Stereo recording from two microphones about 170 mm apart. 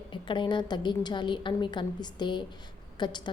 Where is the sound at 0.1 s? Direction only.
30° left (ahead or behind).